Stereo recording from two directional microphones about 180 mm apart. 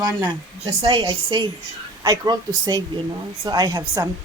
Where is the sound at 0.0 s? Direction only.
15° right (ahead or behind).